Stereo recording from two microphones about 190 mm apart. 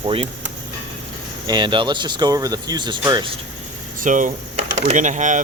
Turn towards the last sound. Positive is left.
turn(degrees=-40)  # may be behind; listen again after turning